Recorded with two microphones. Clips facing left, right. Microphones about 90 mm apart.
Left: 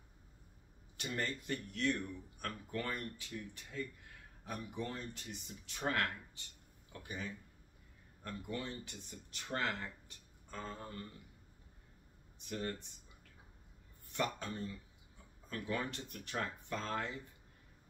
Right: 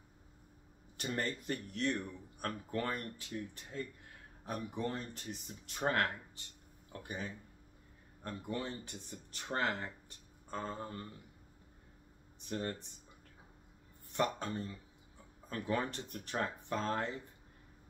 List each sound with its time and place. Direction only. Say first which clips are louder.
0.9 s speech: right 2 dB; 40° right (ahead or behind)
12.4 s speech: right 2 dB; 35° right (ahead or behind)
14.1 s speech: right 4 dB; 35° right (ahead or behind)